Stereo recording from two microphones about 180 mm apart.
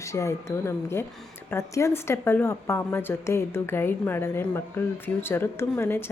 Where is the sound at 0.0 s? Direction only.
15° left (ahead or behind).